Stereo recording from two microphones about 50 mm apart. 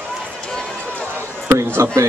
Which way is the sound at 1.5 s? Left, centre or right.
Right.